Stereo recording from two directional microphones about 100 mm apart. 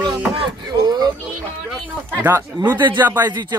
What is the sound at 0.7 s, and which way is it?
Music, 45° right (ahead or behind).